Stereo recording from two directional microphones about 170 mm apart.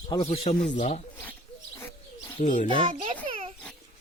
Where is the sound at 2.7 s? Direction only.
30° right (ahead or behind).